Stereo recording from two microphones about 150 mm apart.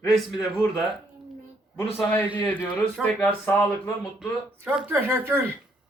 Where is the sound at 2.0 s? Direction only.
15° left (ahead or behind).